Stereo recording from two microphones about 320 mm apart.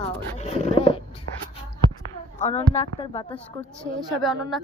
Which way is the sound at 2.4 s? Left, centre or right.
Centre.